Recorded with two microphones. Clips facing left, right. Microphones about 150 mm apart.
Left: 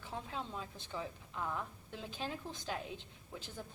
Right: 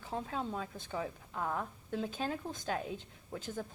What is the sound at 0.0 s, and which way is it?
A woman's voice, 40° right (ahead or behind).